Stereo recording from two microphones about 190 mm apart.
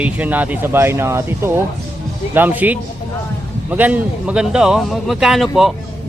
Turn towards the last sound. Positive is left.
turn(degrees=0)  # may be behind; listen again after turning